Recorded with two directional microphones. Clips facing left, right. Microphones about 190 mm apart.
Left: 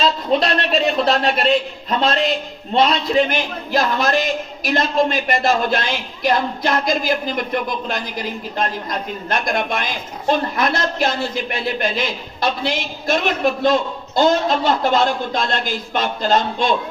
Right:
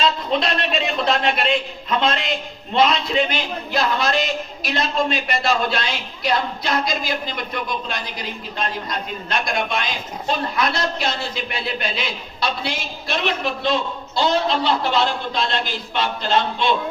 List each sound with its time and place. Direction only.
0.0 s a man's voice: 40° left (ahead or behind)
3.2 s a man's voice: 45° left (ahead or behind)